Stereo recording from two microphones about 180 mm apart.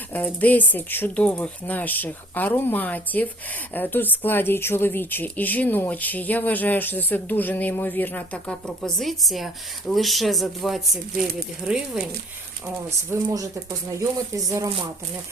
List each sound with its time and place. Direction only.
0.1 s a woman's voice: 10° left (ahead or behind)
13.1 s speech: 20° right (ahead or behind)